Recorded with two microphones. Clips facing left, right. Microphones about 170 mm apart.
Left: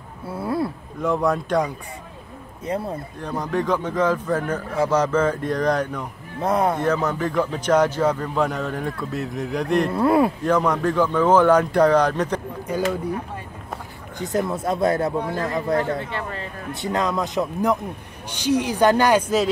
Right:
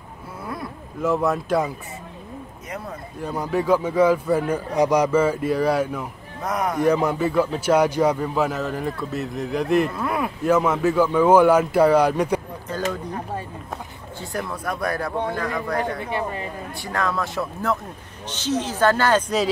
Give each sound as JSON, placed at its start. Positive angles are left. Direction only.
{"t": 0.4, "sound": "a sound", "side_deg": 30}
{"t": 1.0, "sound": "a man's voice", "side_deg": -5}
{"t": 2.6, "sound": "speech", "side_deg": 30}
{"t": 3.2, "sound": "a man's voice", "side_deg": -10}
{"t": 6.4, "sound": "speech", "side_deg": 30}
{"t": 6.8, "sound": "a man's voice", "side_deg": -10}
{"t": 9.9, "sound": "speech", "side_deg": 30}
{"t": 10.4, "sound": "a man's voice", "side_deg": -5}
{"t": 12.7, "sound": "speech", "side_deg": 10}
{"t": 14.1, "sound": "speech", "side_deg": 20}
{"t": 16.0, "sound": "a man's voice", "side_deg": -15}
{"t": 16.7, "sound": "speech", "side_deg": 20}